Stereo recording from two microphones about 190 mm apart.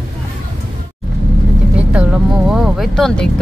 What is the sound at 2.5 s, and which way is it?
Speech, centre (ahead or behind).